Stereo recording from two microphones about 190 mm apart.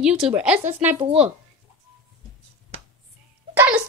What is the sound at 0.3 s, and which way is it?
Speech, 5° right (ahead or behind).